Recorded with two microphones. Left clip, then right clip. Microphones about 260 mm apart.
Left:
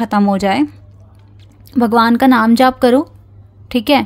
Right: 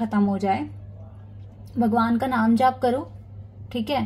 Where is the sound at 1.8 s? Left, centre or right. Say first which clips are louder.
Left 11 dB; left.